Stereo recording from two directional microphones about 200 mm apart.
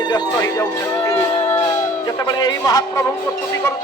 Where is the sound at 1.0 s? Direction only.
15° left (ahead or behind).